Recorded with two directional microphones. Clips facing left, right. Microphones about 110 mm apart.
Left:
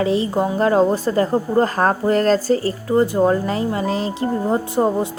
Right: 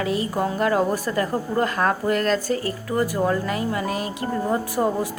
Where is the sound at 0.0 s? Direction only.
25° left (ahead or behind).